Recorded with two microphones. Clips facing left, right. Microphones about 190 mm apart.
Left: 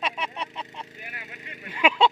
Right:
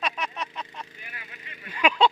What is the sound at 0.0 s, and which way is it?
Vehicle, 30° left (ahead or behind).